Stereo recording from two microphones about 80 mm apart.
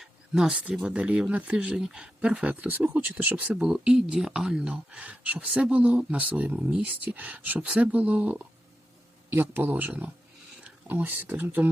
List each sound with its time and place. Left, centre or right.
0.0 s a sound: centre
0.6 s speech: centre
3.6 s speech: centre
9.3 s speech: right